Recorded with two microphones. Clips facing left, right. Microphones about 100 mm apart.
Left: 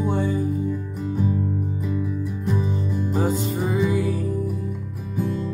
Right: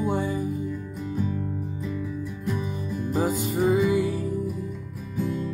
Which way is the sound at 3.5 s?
5° right (ahead or behind).